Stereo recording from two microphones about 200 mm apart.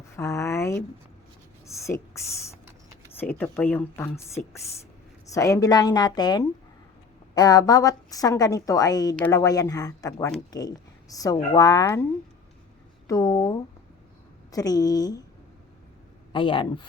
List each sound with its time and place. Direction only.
0.2 s a woman's voice: 15° left (ahead or behind)
5.3 s a woman's voice: 15° left (ahead or behind)
13.1 s a woman's voice: 15° left (ahead or behind)
16.3 s a woman's voice: 25° left (ahead or behind)